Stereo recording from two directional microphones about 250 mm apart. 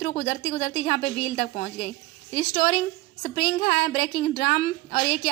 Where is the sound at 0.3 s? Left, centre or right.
Left.